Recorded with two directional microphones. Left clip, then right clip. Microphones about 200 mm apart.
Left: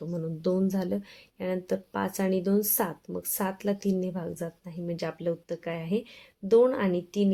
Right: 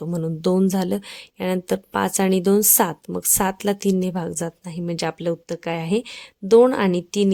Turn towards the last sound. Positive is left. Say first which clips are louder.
# right 7 dB
turn(degrees=-50)  # may be behind; listen again after turning